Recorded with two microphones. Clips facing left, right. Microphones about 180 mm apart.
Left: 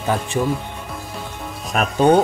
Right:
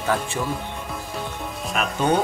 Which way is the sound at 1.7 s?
35° left (ahead or behind).